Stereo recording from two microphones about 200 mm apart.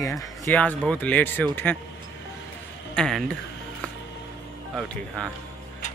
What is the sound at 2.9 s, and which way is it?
Speech, 5° left (ahead or behind).